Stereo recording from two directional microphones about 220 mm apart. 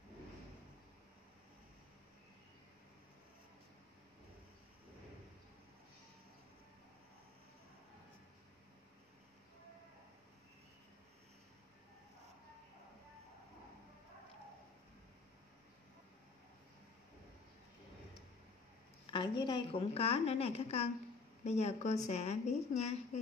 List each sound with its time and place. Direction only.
19.0 s a woman's voice: 20° left (ahead or behind)